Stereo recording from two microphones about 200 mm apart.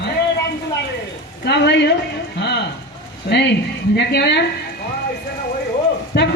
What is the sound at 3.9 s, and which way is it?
Speech, 55° left (ahead or behind).